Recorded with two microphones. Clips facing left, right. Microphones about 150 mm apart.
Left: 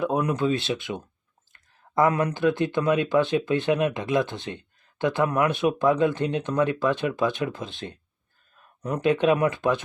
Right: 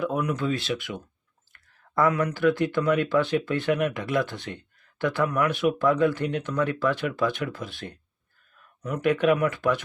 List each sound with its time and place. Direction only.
0.0 s speech: 25° left (ahead or behind)
9.0 s speech: 25° left (ahead or behind)